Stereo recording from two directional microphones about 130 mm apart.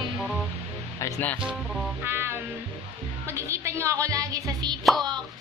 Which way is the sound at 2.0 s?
15° right (ahead or behind).